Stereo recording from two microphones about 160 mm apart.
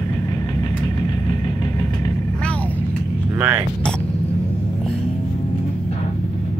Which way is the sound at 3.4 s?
10° right (ahead or behind).